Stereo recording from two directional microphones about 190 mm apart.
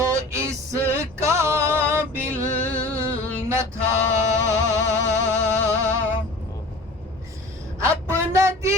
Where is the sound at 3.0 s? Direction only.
15° right (ahead or behind).